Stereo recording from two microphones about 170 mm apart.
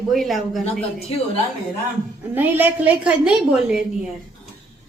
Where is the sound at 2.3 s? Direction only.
10° right (ahead or behind).